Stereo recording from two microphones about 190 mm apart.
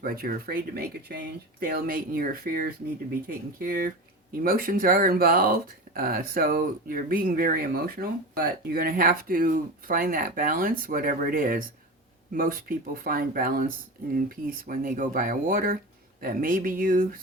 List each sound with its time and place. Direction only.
0.0 s speech: 50° right (ahead or behind)